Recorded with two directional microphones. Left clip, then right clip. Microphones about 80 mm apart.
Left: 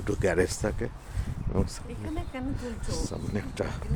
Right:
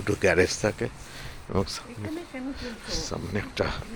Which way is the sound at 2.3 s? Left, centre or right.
Left.